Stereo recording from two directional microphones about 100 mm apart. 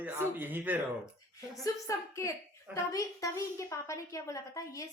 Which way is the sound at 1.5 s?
35° left (ahead or behind).